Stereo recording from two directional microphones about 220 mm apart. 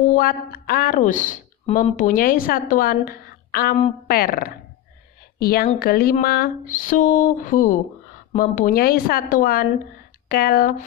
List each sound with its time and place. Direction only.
0.1 s speech: 40° left (ahead or behind)